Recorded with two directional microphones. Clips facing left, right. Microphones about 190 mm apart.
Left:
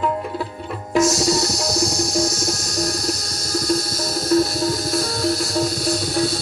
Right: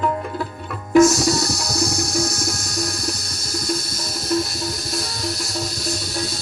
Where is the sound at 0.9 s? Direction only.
55° right (ahead or behind).